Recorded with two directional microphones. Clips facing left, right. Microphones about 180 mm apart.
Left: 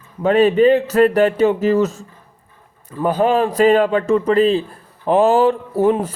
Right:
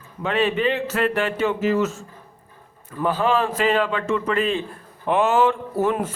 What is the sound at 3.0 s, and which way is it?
A man's voice, 40° left (ahead or behind).